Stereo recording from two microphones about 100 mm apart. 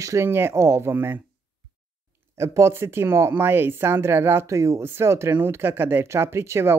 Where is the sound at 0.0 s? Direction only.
30° right (ahead or behind).